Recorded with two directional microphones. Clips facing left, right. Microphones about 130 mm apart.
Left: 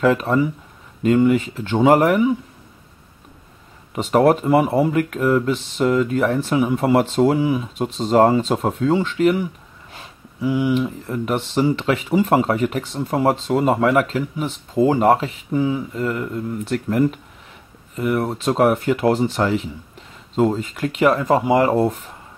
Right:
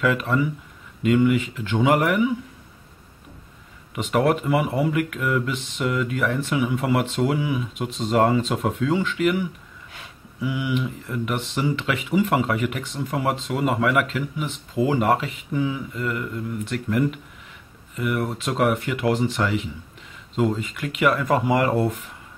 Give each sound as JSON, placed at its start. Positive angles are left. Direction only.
{"t": 0.0, "sound": "speech", "side_deg": 35}
{"t": 3.9, "sound": "speech", "side_deg": 35}